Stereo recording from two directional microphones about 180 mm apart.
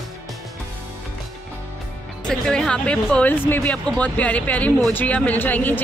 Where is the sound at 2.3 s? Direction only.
5° left (ahead or behind).